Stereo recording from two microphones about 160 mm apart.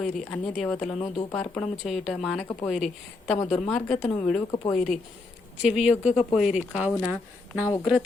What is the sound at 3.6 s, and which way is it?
Speech, 5° left (ahead or behind).